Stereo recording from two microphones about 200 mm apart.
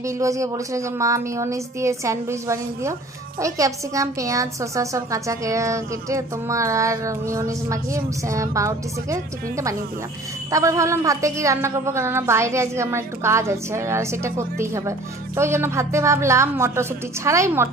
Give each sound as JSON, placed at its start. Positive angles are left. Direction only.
{"t": 0.0, "sound": "a woman's voice", "side_deg": -15}